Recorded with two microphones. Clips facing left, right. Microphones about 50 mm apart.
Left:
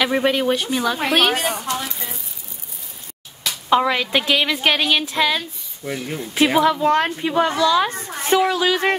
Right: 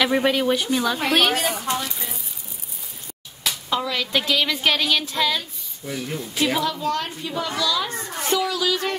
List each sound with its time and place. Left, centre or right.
0.0 s a woman's voice: centre
3.6 s a woman's voice: left